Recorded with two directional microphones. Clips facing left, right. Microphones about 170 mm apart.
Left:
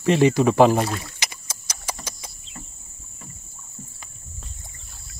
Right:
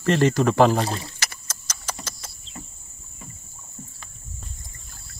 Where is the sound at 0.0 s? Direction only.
10° left (ahead or behind).